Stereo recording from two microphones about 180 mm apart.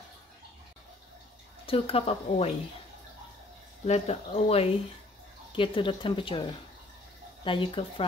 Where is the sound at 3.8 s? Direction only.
35° left (ahead or behind).